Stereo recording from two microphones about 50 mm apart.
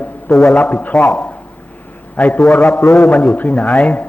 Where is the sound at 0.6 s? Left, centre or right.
Left.